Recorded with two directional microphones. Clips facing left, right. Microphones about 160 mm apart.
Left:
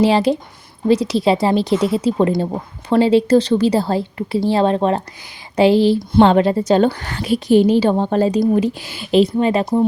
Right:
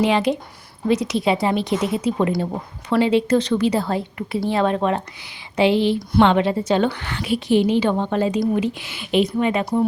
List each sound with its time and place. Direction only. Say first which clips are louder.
0.0 s a woman's voice: left 4 dB; 35° left (ahead or behind)